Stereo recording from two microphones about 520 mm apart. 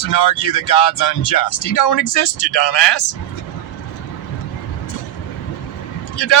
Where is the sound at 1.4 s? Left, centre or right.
Left.